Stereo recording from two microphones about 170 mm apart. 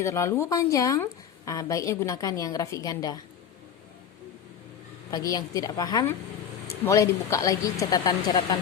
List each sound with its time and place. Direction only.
0.0 s speech: 15° left (ahead or behind)
5.1 s speech: 20° left (ahead or behind)